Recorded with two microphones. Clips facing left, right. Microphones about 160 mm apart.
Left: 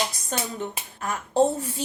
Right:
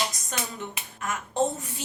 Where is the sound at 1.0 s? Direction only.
30° left (ahead or behind).